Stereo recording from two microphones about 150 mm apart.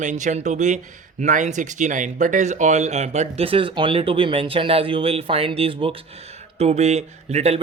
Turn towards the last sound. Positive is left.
turn(degrees=-45)  # may be behind; listen again after turning